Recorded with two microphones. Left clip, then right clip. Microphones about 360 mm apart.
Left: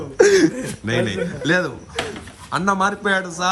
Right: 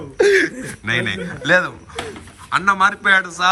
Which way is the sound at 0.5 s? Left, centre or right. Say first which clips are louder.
Right 2 dB; centre.